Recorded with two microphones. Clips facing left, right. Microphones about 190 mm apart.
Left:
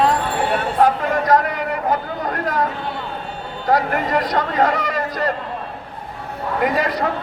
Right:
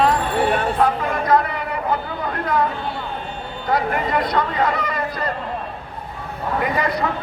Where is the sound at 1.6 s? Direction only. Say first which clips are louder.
Left 2 dB; 45° left (ahead or behind).